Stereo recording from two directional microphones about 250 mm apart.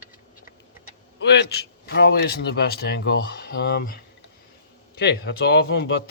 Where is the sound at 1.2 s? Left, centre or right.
Left.